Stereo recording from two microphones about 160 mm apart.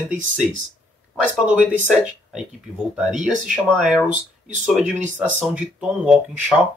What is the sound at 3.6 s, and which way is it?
Speech, centre (ahead or behind).